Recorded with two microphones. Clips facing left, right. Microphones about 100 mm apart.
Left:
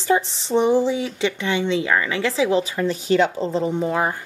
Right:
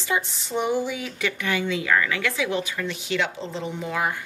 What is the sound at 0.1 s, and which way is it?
A woman's voice, 30° left (ahead or behind).